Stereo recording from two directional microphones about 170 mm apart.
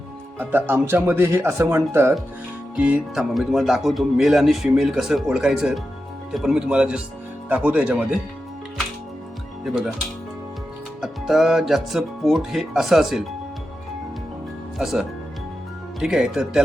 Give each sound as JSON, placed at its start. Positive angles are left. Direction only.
{"t": 0.3, "sound": "speech", "side_deg": -10}
{"t": 9.6, "sound": "speech", "side_deg": 0}
{"t": 11.0, "sound": "speech", "side_deg": 0}
{"t": 14.8, "sound": "speech", "side_deg": -5}
{"t": 16.0, "sound": "speech", "side_deg": -5}